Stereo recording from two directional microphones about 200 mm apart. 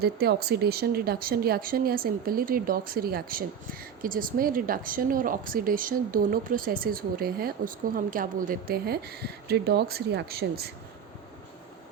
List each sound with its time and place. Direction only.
0.0 s speech: 50° right (ahead or behind)